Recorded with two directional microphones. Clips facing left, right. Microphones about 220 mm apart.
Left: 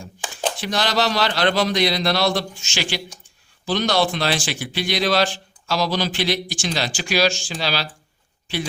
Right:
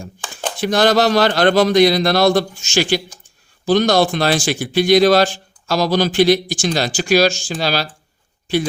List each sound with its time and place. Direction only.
0.6 s speech: 50° right (ahead or behind)